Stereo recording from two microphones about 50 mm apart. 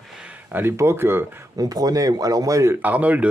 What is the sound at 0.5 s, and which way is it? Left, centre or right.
Speech, right.